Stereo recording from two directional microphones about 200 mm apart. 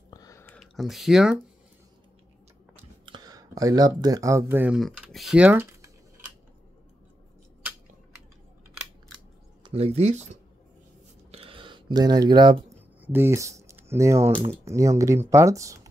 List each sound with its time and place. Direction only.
0.1 s a sound: 15° left (ahead or behind)
0.6 s speech: centre (ahead or behind)
2.7 s speech: 20° right (ahead or behind)
9.7 s speech: 30° right (ahead or behind)
11.3 s a sound: 25° right (ahead or behind)
13.0 s speech: 10° right (ahead or behind)